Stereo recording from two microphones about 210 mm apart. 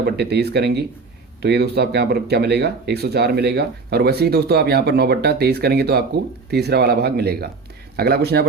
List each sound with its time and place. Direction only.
0.0 s speech: 50° right (ahead or behind)